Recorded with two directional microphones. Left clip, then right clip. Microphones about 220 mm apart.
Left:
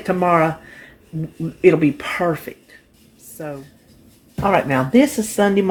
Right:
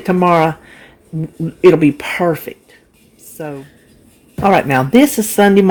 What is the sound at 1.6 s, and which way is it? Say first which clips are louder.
Speech: right 5 dB; 40° right (ahead or behind).